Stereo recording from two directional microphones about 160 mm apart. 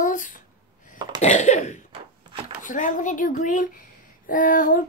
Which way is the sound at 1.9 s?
35° right (ahead or behind).